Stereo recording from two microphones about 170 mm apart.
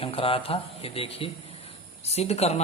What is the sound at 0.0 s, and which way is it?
A man's voice, 35° left (ahead or behind).